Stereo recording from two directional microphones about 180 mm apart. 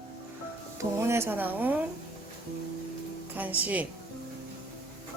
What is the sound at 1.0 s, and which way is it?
Speech, 15° right (ahead or behind).